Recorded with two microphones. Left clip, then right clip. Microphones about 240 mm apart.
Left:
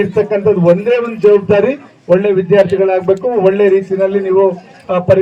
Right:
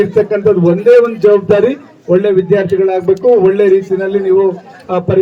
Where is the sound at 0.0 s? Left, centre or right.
Centre.